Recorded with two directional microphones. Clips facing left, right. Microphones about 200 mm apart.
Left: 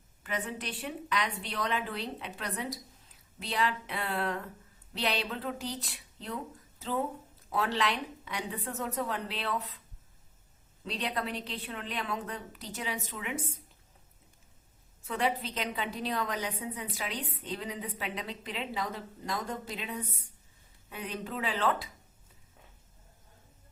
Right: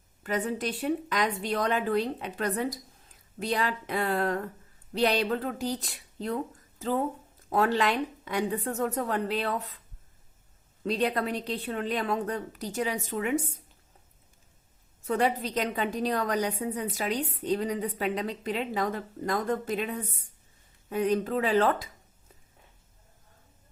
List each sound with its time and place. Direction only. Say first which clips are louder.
0.2 s a woman's voice: right 7 dB; 40° right (ahead or behind)
10.8 s a woman's voice: right 7 dB; 45° right (ahead or behind)
15.0 s a woman's voice: right 5 dB; 40° right (ahead or behind)